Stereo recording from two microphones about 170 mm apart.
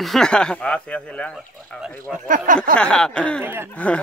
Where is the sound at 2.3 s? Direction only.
50° right (ahead or behind).